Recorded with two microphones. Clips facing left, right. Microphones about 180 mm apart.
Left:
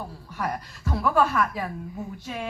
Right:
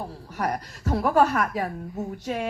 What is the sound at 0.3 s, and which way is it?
Speech, 40° right (ahead or behind).